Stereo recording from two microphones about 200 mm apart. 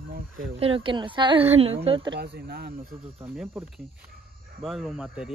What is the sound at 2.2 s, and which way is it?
Speech, 50° right (ahead or behind).